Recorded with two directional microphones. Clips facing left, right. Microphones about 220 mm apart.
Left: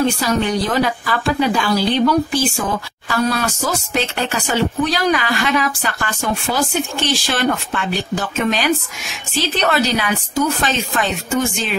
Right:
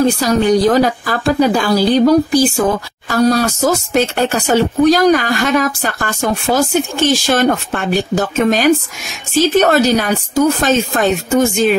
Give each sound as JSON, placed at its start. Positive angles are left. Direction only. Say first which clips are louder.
{"t": 0.0, "sound": "a woman's voice", "louder": "right 5 dB", "side_deg": -40}